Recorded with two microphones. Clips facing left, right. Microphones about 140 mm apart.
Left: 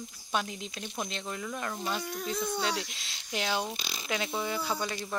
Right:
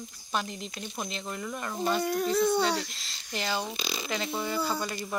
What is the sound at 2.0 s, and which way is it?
Speech, 65° right (ahead or behind).